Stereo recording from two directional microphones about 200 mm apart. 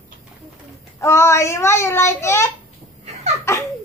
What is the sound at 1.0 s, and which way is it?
A child's voice, 15° left (ahead or behind).